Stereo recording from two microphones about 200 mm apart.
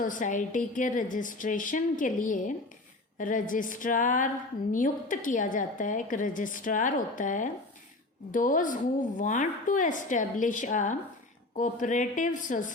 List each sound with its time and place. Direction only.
0.0 s a woman's voice: 40° left (ahead or behind)